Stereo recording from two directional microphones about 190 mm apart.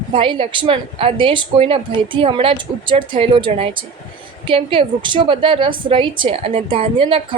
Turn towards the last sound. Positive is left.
turn(degrees=-25)  # may be behind; listen again after turning